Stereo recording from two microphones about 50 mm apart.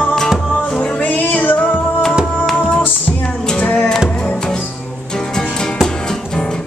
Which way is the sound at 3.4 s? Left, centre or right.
Centre.